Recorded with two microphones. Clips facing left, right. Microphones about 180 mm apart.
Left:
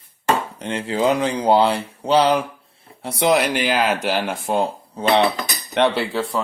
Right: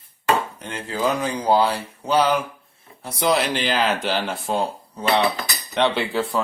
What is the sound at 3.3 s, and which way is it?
Speech, 10° left (ahead or behind).